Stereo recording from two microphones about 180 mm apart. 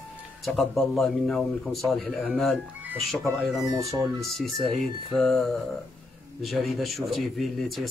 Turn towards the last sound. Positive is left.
turn(degrees=0)  # may be behind; listen again after turning